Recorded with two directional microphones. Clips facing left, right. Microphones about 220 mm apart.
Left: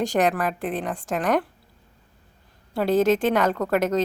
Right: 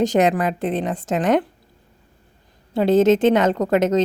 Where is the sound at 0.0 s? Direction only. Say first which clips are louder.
Right 5 dB; 20° right (ahead or behind).